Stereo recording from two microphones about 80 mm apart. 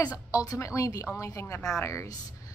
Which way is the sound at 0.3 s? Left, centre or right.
Left.